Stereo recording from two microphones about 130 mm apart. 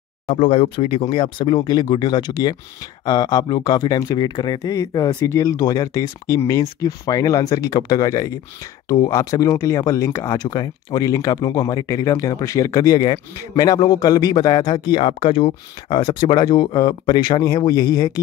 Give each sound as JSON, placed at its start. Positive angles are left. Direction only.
{"t": 0.3, "sound": "speech", "side_deg": 45}